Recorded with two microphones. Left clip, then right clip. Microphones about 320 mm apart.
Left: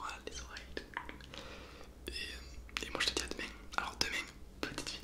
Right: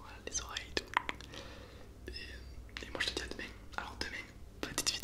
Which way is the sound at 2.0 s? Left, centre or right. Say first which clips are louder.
Left 4 dB; centre.